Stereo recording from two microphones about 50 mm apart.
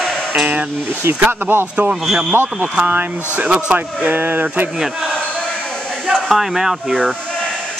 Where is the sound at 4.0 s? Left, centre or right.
Right.